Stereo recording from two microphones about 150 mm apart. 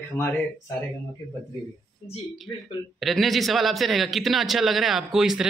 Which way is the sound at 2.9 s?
Centre (ahead or behind).